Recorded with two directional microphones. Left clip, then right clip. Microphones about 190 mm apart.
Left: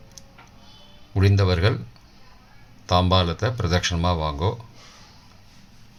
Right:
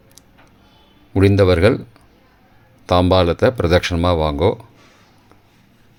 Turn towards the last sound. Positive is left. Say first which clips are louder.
# right 8 dB
turn(degrees=-40)  # may be behind; listen again after turning